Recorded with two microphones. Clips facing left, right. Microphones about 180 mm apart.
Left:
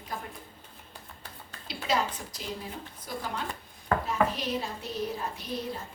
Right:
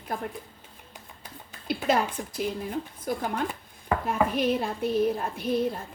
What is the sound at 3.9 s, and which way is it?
Chopping, 15° right (ahead or behind).